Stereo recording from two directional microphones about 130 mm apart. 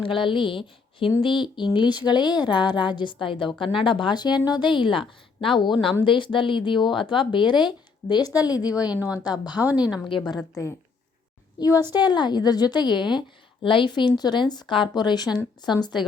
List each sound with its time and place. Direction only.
0.0 s a woman's voice: 40° left (ahead or behind)
8.6 s a woman's voice: 10° right (ahead or behind)
9.2 s a woman's voice: 30° left (ahead or behind)
9.6 s a woman's voice: 10° right (ahead or behind)
10.1 s a woman's voice: 35° left (ahead or behind)
11.9 s a woman's voice: 35° left (ahead or behind)